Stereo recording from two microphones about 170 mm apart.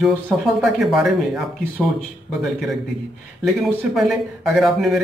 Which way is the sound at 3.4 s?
Centre (ahead or behind).